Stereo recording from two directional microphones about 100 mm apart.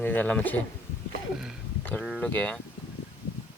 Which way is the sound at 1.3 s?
5° right (ahead or behind).